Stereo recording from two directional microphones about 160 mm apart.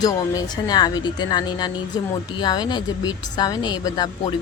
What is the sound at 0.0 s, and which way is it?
Speech, 25° left (ahead or behind).